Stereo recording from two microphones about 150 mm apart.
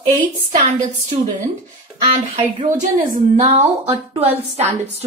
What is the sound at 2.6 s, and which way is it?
Speech, 50° right (ahead or behind).